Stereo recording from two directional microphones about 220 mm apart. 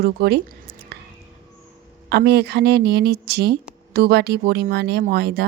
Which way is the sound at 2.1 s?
50° right (ahead or behind).